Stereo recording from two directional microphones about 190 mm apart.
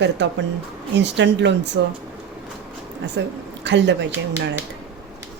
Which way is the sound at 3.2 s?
70° right (ahead or behind).